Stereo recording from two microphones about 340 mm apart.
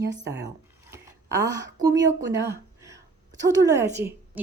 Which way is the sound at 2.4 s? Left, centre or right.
Centre.